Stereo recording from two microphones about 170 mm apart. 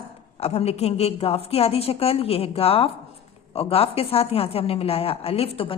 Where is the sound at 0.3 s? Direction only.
35° left (ahead or behind).